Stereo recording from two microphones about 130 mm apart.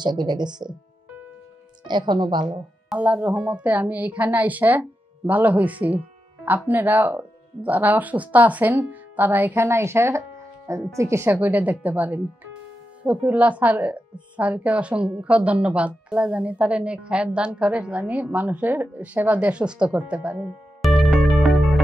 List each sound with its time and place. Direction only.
0.0 s speech: 35° right (ahead or behind)
1.9 s speech: 35° right (ahead or behind)
2.9 s a woman's voice: 10° right (ahead or behind)
20.8 s music: centre (ahead or behind)